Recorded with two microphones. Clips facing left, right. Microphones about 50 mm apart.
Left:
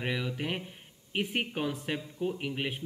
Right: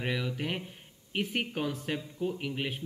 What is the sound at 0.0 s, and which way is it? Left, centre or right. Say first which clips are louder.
Speech: even; centre.